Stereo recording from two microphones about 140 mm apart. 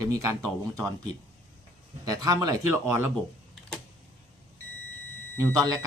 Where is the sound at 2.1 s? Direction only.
25° right (ahead or behind).